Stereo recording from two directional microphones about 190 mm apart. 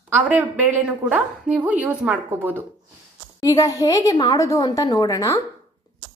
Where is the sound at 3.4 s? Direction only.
20° left (ahead or behind).